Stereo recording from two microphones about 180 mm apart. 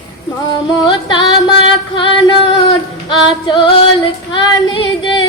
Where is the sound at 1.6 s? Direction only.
25° left (ahead or behind).